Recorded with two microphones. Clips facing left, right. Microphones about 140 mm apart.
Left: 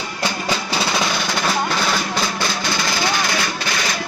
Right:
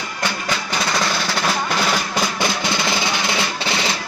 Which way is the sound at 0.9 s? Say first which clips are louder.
Even; 5° left (ahead or behind).